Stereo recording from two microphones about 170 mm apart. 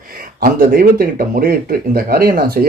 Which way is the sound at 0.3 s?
60° right (ahead or behind).